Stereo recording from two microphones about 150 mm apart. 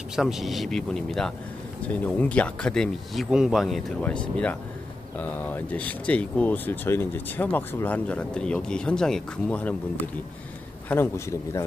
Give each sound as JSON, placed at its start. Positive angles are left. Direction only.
{"t": 0.1, "sound": "a man's voice", "side_deg": 0}